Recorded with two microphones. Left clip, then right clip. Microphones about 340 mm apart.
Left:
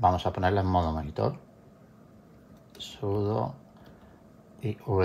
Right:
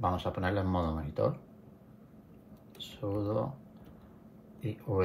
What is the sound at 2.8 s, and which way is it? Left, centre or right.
Speech, left.